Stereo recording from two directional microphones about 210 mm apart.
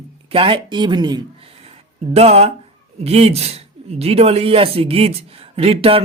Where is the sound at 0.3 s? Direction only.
25° right (ahead or behind).